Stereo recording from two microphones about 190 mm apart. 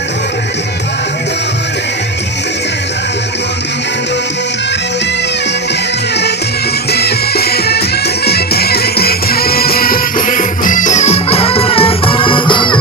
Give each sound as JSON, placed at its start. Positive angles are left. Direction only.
{"t": 6.9, "sound": "music", "side_deg": 55}